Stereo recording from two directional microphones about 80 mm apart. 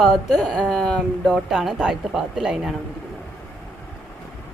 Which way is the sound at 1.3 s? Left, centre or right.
Centre.